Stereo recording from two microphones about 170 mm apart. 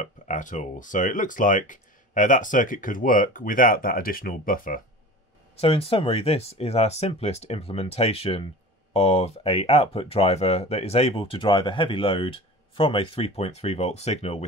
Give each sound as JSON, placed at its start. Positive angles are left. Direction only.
{"t": 0.0, "sound": "speech", "side_deg": 50}
{"t": 5.6, "sound": "speech", "side_deg": 35}